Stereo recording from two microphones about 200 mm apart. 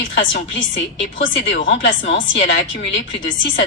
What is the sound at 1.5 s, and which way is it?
A woman's voice, 65° left (ahead or behind).